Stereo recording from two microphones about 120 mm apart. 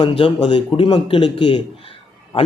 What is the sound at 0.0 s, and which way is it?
A man's voice, 50° left (ahead or behind).